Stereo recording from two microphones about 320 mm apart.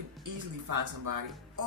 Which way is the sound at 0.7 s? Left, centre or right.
Right.